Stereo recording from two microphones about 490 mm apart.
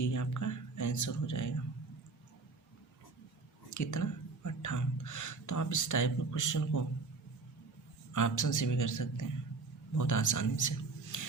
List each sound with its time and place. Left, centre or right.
0.0 s a sound: left
3.7 s speech: left
8.1 s a man's voice: left